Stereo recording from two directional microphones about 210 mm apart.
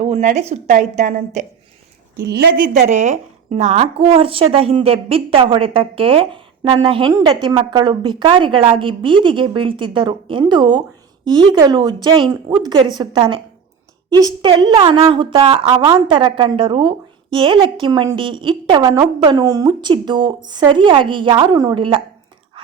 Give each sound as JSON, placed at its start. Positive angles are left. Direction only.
{"t": 0.0, "sound": "a woman's voice", "side_deg": -35}